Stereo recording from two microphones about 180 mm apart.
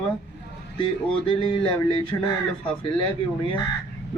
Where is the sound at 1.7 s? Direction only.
30° left (ahead or behind).